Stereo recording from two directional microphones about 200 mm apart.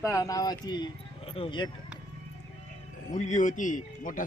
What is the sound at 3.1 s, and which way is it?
A man's voice, 35° left (ahead or behind).